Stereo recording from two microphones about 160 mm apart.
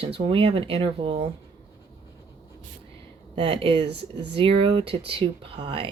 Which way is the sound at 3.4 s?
35° right (ahead or behind).